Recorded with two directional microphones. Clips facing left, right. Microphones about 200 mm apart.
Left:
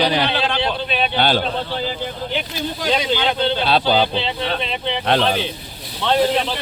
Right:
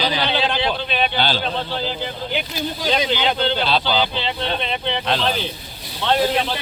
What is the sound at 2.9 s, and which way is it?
A man's voice, centre (ahead or behind).